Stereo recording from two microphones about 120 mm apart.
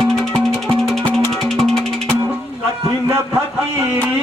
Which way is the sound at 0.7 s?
5° left (ahead or behind).